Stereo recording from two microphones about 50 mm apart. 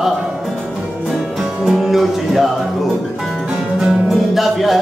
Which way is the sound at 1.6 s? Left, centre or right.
Centre.